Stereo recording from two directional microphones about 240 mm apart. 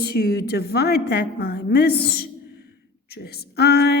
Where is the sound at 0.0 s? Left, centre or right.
Left.